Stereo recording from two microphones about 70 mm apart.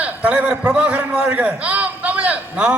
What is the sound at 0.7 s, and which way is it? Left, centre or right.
A man's voice, centre.